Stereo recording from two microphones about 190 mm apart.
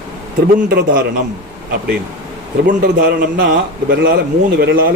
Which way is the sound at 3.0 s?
50° right (ahead or behind).